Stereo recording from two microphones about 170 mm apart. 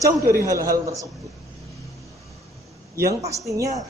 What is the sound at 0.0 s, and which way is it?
A man's voice, 20° right (ahead or behind).